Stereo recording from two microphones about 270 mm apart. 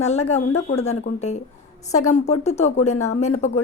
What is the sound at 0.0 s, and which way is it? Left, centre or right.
A woman's voice, left.